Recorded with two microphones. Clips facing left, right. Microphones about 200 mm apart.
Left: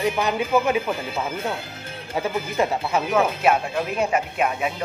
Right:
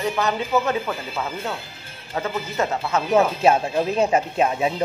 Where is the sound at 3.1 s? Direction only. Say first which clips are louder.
Right 4 dB; 25° right (ahead or behind).